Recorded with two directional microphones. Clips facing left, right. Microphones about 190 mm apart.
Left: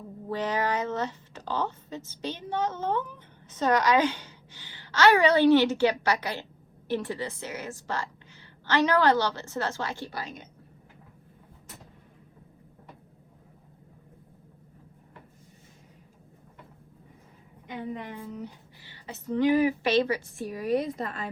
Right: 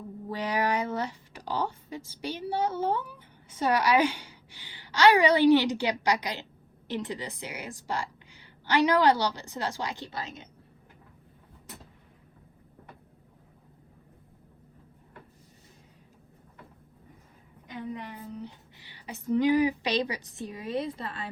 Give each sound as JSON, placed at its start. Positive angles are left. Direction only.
{"t": 0.3, "sound": "speech", "side_deg": -10}
{"t": 18.8, "sound": "speech", "side_deg": -15}